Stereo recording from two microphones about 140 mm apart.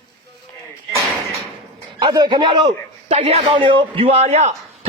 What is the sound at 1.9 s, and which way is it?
Speech, 30° right (ahead or behind).